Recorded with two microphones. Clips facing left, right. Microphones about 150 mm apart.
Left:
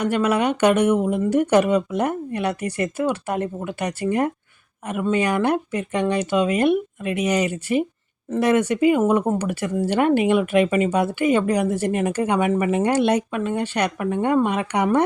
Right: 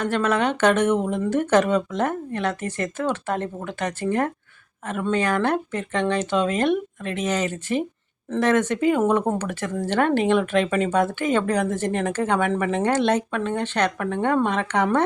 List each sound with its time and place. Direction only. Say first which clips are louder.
0.0 s speech: left 2 dB; 10° left (ahead or behind)